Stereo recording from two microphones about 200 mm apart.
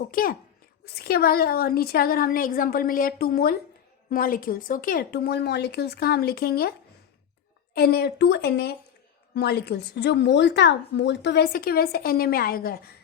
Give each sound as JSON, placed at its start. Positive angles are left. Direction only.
{"t": 0.1, "sound": "a woman's voice", "side_deg": 45}
{"t": 7.7, "sound": "a woman's voice", "side_deg": 50}